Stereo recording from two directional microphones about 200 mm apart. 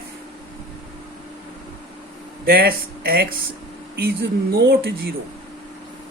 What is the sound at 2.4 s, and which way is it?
Speech, 50° right (ahead or behind).